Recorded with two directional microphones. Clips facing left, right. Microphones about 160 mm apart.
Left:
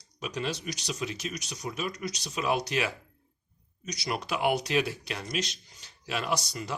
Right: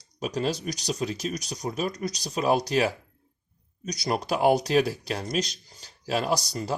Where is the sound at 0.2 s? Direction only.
40° right (ahead or behind).